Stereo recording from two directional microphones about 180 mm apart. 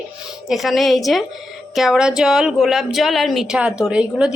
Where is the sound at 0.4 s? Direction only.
Centre (ahead or behind).